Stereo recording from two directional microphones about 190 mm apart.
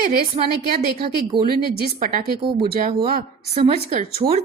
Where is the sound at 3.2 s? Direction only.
40° right (ahead or behind).